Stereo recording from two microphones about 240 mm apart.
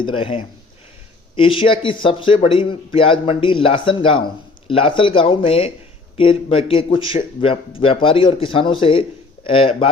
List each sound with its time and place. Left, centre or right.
0.2 s a man's voice: left